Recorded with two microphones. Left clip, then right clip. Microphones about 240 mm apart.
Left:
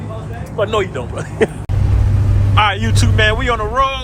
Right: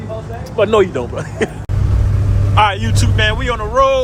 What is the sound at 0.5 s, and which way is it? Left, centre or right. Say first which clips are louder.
Speech: right 5 dB; right.